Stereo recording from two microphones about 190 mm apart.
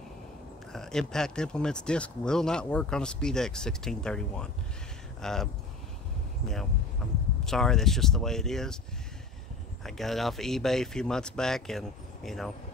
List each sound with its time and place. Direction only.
0.7 s speech: 5° left (ahead or behind)
7.4 s speech: centre (ahead or behind)
9.8 s speech: centre (ahead or behind)